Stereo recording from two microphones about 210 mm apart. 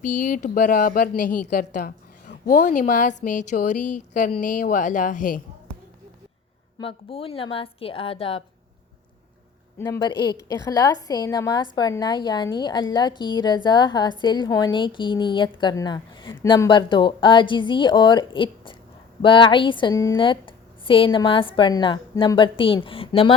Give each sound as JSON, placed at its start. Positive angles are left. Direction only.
{"t": 0.0, "sound": "a woman's voice", "side_deg": 40}
{"t": 6.7, "sound": "a woman's voice", "side_deg": 25}
{"t": 9.7, "sound": "a woman's voice", "side_deg": 15}